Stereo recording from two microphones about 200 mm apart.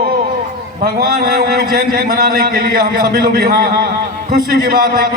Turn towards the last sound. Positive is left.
turn(degrees=-45)  # may be behind; listen again after turning